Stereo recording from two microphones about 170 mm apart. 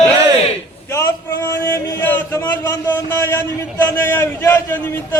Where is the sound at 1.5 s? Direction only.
15° left (ahead or behind).